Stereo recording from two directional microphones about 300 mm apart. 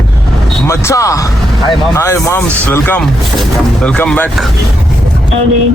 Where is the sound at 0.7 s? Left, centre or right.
Centre.